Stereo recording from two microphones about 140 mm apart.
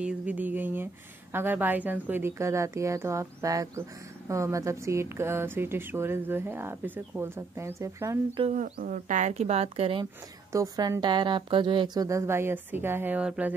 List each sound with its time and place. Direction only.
0.0 s a woman's voice: 10° right (ahead or behind)
8.5 s speech: 55° right (ahead or behind)
8.7 s speech: 70° right (ahead or behind); by 10.0 s 40° right (ahead or behind)
10.5 s a woman's voice: 25° right (ahead or behind)